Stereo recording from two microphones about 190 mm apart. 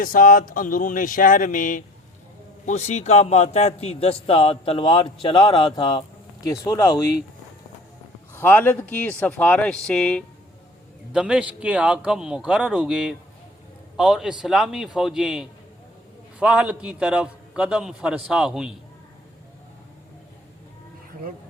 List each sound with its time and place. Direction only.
0.0 s a man's voice: 50° left (ahead or behind); by 7.0 s 15° left (ahead or behind)
8.3 s speech: 10° left (ahead or behind)
11.1 s a man's voice: 5° right (ahead or behind)